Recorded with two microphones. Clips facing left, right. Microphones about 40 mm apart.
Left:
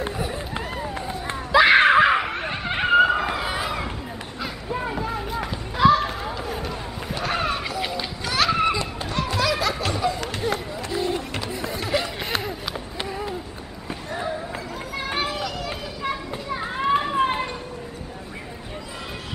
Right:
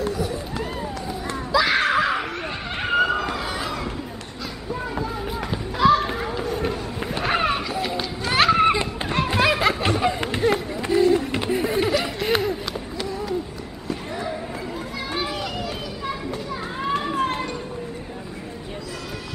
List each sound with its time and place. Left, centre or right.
0.0 s run: left
1.5 s laughter: left; by 3.9 s centre
4.4 s music: left
5.2 s run: centre
5.8 s children playing: centre
6.7 s run: centre
8.0 s children playing: right
8.5 s a sound: right
12.3 s run: centre
13.0 s a sound: left
15.0 s children playing: left